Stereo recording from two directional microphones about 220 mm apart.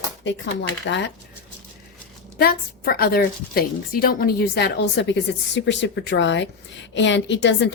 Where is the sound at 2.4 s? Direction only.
40° left (ahead or behind).